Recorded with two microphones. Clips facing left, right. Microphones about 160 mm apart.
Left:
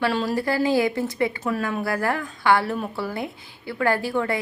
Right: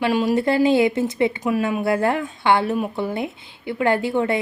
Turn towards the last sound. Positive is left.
turn(degrees=-20)  # may be behind; listen again after turning